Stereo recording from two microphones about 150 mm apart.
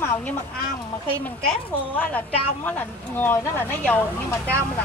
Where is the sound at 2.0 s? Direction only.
10° left (ahead or behind).